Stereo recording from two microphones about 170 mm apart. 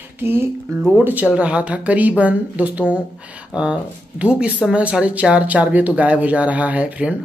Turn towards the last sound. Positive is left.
turn(degrees=-10)  # may be behind; listen again after turning